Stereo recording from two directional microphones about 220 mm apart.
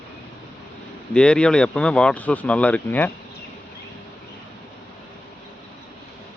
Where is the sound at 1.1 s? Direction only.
5° left (ahead or behind).